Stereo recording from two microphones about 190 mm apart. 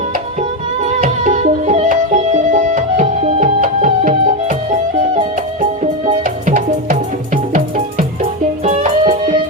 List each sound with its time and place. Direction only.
0.9 s music: 40° right (ahead or behind)
5.8 s music: 40° right (ahead or behind)